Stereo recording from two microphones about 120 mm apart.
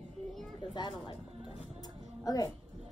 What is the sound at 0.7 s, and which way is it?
Speech, 40° left (ahead or behind).